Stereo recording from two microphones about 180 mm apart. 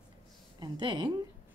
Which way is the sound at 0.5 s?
25° right (ahead or behind).